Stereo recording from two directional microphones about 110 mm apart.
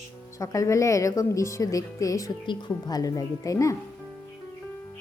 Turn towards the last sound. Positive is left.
turn(degrees=30)  # may be behind; listen again after turning